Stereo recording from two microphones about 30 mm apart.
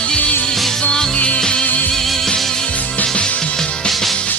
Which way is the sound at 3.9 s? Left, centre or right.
Centre.